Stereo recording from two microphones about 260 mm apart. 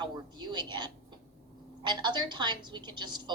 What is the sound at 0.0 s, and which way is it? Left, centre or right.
A woman's voice, centre.